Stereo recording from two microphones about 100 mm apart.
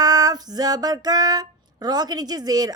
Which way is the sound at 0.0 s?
40° right (ahead or behind).